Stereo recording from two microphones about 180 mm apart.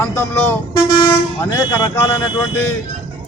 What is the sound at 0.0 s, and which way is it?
Speech, 15° left (ahead or behind).